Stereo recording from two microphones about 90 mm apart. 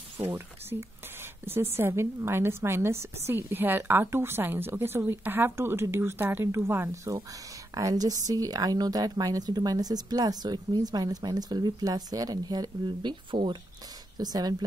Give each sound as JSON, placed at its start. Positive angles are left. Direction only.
{"t": 0.2, "sound": "a woman's voice", "side_deg": -25}
{"t": 7.7, "sound": "speech", "side_deg": -45}
{"t": 14.1, "sound": "speech", "side_deg": -45}